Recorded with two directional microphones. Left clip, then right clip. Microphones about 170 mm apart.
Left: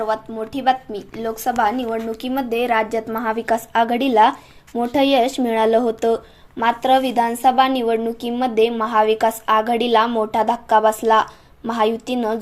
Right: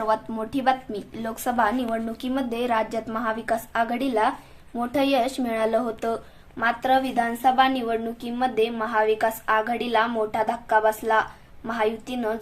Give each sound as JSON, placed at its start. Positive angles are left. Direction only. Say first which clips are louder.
{"t": 0.1, "sound": "a woman's voice", "louder": "left 2 dB", "side_deg": 10}